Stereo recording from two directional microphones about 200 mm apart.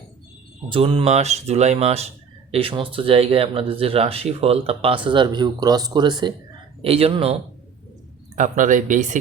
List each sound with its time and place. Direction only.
0.7 s speech: 25° right (ahead or behind)
8.4 s speech: 40° right (ahead or behind)